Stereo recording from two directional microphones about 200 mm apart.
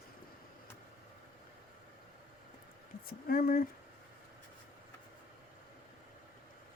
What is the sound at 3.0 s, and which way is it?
Speech, 45° left (ahead or behind).